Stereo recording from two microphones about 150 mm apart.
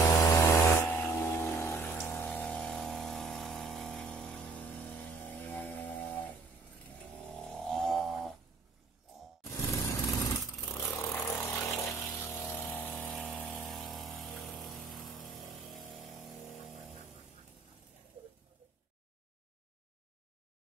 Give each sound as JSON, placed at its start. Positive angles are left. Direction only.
{"t": 0.0, "sound": "music", "side_deg": 20}
{"t": 5.5, "sound": "a sound", "side_deg": 10}
{"t": 7.3, "sound": "wild animals", "side_deg": 0}
{"t": 9.4, "sound": "vehicle", "side_deg": 20}